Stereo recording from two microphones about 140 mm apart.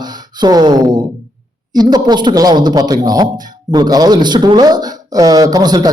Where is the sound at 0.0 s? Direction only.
30° right (ahead or behind).